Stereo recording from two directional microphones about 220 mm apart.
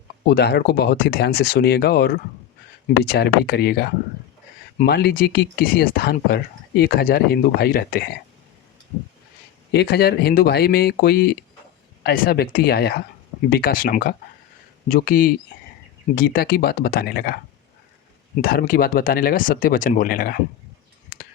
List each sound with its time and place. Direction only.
0.3 s speech: 45° left (ahead or behind)
9.7 s speech: 45° left (ahead or behind)
18.4 s speech: 40° left (ahead or behind)
21.1 s whispering: 45° left (ahead or behind)